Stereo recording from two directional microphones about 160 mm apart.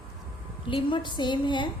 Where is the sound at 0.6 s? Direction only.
30° left (ahead or behind).